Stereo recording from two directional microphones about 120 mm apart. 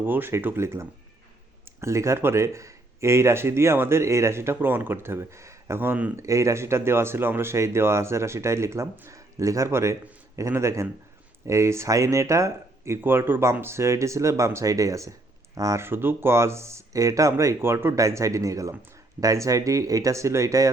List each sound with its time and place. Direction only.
0.0 s speech: 15° right (ahead or behind)
6.2 s speech: 25° right (ahead or behind)